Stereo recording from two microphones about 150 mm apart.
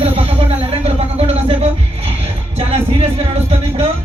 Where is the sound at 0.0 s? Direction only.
40° right (ahead or behind).